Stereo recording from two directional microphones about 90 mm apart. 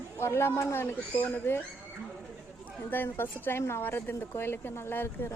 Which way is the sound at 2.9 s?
25° left (ahead or behind).